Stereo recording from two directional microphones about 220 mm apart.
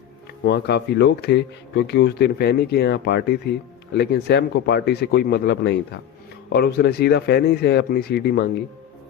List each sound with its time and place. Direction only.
0.4 s speech: 50° left (ahead or behind)